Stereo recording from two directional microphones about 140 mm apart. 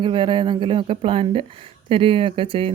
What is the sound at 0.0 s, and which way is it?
Speech, 35° right (ahead or behind).